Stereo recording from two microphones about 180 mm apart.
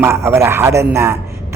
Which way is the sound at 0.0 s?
15° right (ahead or behind).